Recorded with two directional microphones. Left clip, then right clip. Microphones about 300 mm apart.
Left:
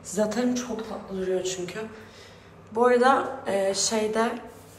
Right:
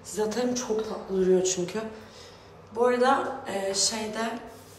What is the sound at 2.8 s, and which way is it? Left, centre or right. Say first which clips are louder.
A woman's voice: left 3 dB; centre.